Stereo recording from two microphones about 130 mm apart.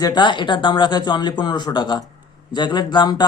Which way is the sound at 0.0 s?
35° left (ahead or behind).